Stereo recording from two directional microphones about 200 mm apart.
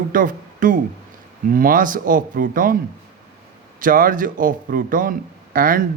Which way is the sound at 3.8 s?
45° right (ahead or behind).